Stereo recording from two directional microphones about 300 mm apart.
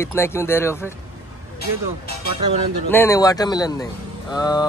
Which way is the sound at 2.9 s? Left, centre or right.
Centre.